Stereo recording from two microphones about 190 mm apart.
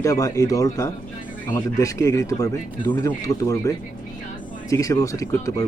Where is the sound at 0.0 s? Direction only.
20° left (ahead or behind).